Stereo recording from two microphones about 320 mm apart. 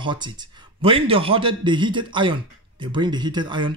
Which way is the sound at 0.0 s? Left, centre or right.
Centre.